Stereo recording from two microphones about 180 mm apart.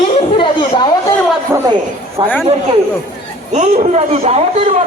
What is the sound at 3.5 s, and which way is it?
A man's voice, 35° right (ahead or behind).